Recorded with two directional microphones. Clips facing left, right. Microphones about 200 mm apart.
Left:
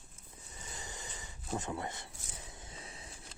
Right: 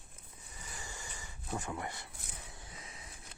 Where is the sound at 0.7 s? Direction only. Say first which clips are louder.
Left 1 dB; 20° left (ahead or behind).